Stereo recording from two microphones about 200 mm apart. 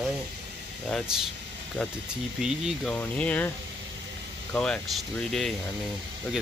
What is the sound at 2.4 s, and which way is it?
Speech, centre (ahead or behind).